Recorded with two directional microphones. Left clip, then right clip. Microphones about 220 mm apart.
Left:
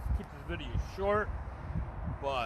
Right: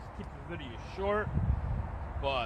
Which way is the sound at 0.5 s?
10° left (ahead or behind).